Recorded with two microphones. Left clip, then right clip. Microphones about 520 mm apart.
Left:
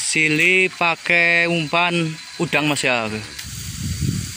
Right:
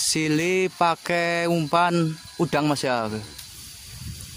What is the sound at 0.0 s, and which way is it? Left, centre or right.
Speech, right.